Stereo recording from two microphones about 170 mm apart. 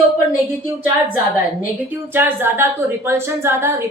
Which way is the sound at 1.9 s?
10° right (ahead or behind).